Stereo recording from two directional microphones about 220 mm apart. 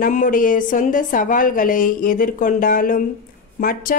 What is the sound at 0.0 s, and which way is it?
A woman's voice, 35° left (ahead or behind).